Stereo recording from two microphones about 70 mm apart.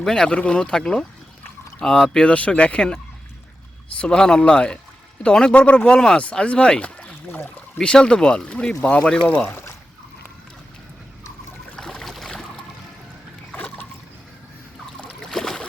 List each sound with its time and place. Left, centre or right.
0.0 s speech: centre; by 7.5 s left
7.8 s speech: centre; by 9.7 s left
11.8 s a sound: centre
15.3 s boat: centre